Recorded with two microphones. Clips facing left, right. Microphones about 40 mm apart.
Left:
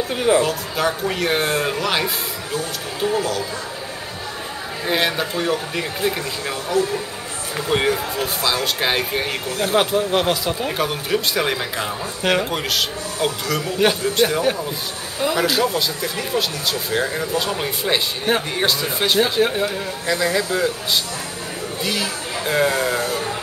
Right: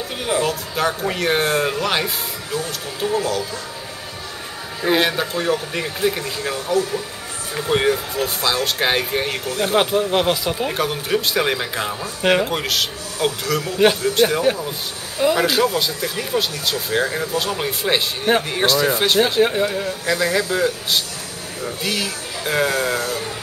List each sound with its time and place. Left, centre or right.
0.4 s speech: centre
4.8 s speech: centre
7.7 s speech: centre
22.7 s speech: centre
22.9 s music: left